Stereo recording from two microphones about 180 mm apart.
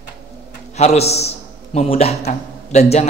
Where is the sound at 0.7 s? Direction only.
35° left (ahead or behind).